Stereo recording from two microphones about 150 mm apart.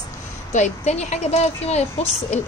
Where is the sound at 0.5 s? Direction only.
50° left (ahead or behind).